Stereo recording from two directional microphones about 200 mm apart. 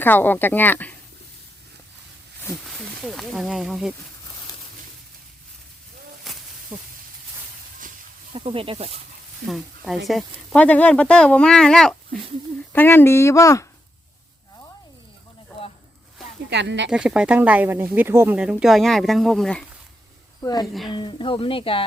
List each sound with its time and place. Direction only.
0.0 s speech: 10° left (ahead or behind)
2.6 s speech: centre (ahead or behind)
6.3 s a sound: centre (ahead or behind)
6.7 s speech: 5° right (ahead or behind)
8.3 s speech: 25° right (ahead or behind)
9.5 s speech: centre (ahead or behind); by 13.7 s 15° left (ahead or behind)
16.5 s speech: 60° right (ahead or behind)
16.9 s speech: 5° right (ahead or behind)
20.4 s speech: 20° left (ahead or behind)